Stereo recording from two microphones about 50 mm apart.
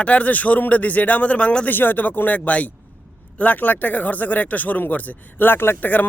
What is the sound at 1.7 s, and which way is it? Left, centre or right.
A man's voice, left.